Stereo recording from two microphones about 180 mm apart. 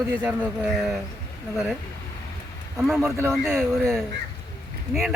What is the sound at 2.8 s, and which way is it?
Speech, centre (ahead or behind).